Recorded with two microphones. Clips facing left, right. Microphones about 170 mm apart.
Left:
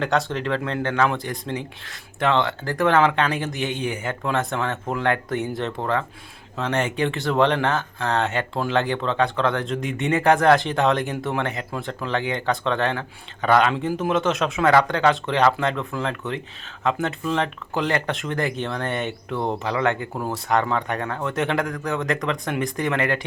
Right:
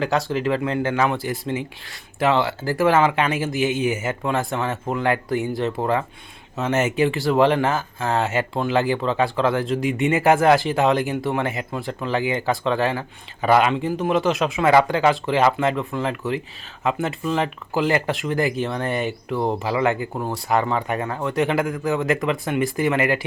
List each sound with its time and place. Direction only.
0.0 s speech: 5° right (ahead or behind)
5.8 s speech: 10° right (ahead or behind)